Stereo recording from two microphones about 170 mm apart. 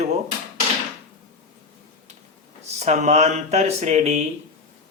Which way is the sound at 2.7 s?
45° right (ahead or behind).